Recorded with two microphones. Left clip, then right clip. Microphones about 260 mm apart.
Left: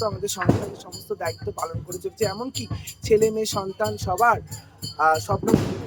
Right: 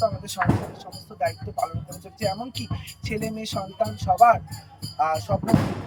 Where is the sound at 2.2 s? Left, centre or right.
Centre.